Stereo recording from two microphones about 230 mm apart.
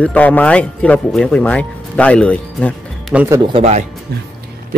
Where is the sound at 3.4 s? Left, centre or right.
Right.